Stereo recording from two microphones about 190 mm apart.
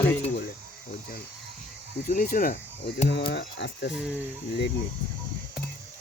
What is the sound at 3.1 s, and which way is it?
Speech, 65° left (ahead or behind).